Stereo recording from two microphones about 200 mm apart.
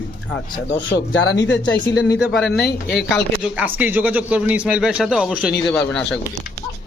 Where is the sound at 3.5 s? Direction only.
10° right (ahead or behind).